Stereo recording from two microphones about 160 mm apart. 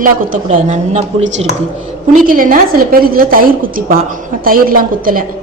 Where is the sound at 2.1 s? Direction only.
60° right (ahead or behind).